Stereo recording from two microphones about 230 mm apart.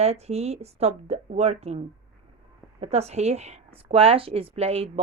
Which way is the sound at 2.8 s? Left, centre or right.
Right.